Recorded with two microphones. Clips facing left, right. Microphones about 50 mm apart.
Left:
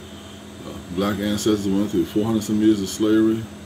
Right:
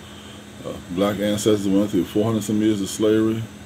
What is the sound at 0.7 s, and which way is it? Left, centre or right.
Speech, right.